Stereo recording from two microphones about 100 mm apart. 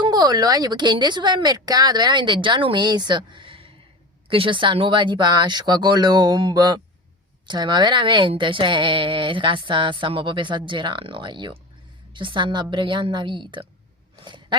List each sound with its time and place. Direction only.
0.0 s a woman's voice: 40° right (ahead or behind)